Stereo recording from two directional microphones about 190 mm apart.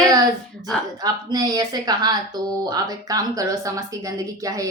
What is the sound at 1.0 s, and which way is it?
A woman's voice, 20° right (ahead or behind).